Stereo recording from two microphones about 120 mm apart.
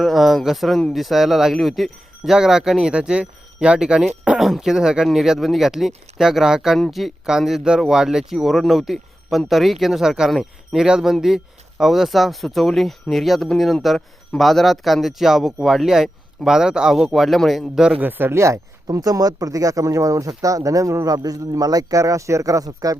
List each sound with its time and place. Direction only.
0.0 s speech: centre (ahead or behind)
18.0 s speech: 20° right (ahead or behind)